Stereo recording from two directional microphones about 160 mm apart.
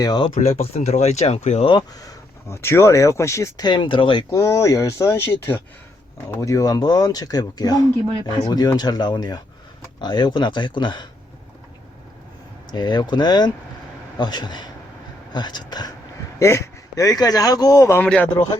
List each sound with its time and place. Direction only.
0.0 s speech: 25° left (ahead or behind)
0.3 s speech: 40° left (ahead or behind)
1.7 s speech: 25° left (ahead or behind)
12.7 s speech: 25° left (ahead or behind); by 18.4 s 10° left (ahead or behind)